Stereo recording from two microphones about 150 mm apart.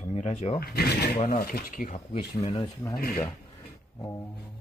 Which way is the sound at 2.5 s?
25° left (ahead or behind).